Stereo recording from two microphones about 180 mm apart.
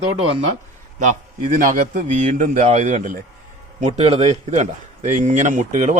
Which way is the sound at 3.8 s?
35° right (ahead or behind).